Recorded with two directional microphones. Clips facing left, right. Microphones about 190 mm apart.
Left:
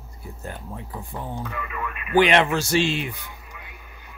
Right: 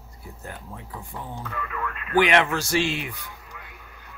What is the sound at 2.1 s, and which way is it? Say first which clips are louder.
Speech: left 2 dB; 30° left (ahead or behind).